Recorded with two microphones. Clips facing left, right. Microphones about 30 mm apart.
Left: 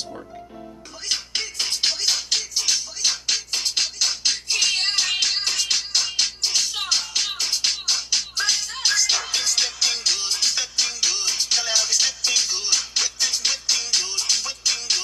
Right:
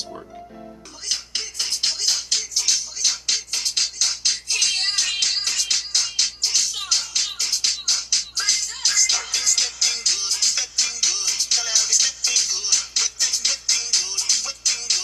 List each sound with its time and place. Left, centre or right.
1.0 s music: centre